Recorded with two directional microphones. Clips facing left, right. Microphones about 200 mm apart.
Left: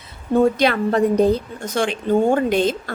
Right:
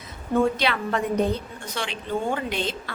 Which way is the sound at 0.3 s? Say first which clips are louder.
Left 6 dB; 45° left (ahead or behind).